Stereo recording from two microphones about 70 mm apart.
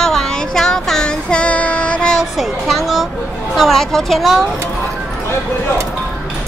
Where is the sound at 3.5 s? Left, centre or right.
Centre.